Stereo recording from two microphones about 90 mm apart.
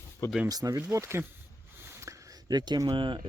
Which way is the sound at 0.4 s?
40° right (ahead or behind).